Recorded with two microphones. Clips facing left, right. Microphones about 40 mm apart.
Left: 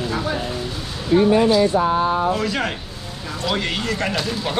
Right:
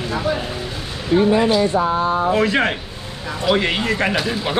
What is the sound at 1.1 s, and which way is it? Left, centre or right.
Speech, right.